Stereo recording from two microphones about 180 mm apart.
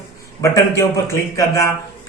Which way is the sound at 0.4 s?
20° left (ahead or behind).